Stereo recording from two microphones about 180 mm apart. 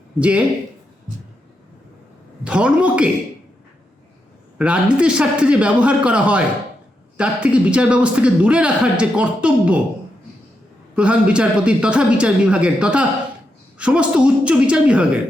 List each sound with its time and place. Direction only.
0.2 s speech: 5° right (ahead or behind)
2.4 s a woman's voice: 5° right (ahead or behind)
4.5 s speech: 5° right (ahead or behind)
7.4 s speech: 5° right (ahead or behind)
10.9 s speech: 5° right (ahead or behind)